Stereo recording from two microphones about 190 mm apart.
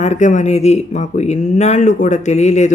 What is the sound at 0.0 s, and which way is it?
Speech, 40° left (ahead or behind).